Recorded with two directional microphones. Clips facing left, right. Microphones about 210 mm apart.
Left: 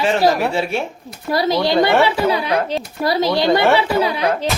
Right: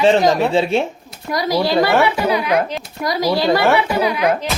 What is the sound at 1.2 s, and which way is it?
Speech, 30° left (ahead or behind).